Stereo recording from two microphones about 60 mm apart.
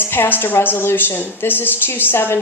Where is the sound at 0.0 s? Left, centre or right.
Left.